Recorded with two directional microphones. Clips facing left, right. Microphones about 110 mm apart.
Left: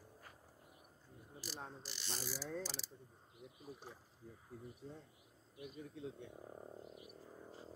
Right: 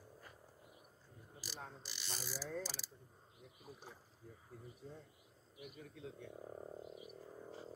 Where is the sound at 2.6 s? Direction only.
5° right (ahead or behind).